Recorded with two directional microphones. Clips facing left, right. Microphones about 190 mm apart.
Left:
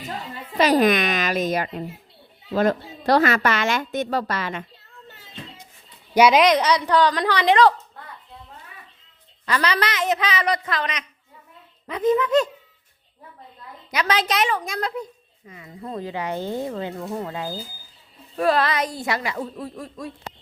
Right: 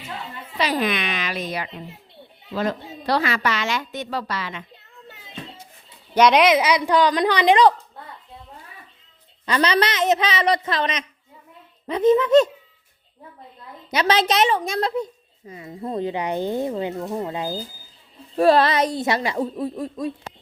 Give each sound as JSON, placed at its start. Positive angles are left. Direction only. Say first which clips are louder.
{"t": 0.0, "sound": "speech", "louder": "left 2 dB", "side_deg": 45}
{"t": 5.0, "sound": "a sound", "louder": "right 3 dB", "side_deg": -15}
{"t": 6.1, "sound": "a woman's voice", "louder": "even", "side_deg": 5}
{"t": 9.5, "sound": "a woman's voice", "louder": "right 3 dB", "side_deg": -20}
{"t": 13.9, "sound": "a woman's voice", "louder": "right 3 dB", "side_deg": -25}
{"t": 18.3, "sound": "a woman's voice", "louder": "right 4 dB", "side_deg": -30}